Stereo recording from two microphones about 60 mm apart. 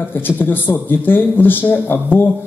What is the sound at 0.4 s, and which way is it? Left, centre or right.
A man's voice, left.